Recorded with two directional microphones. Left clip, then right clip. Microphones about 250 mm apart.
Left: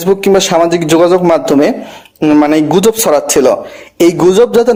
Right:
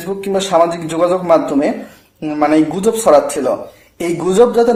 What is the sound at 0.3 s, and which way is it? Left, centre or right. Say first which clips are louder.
Speech: left 4 dB; left.